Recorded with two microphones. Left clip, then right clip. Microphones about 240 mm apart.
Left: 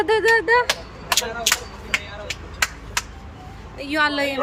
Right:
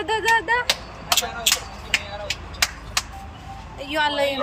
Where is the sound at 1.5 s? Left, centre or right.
Centre.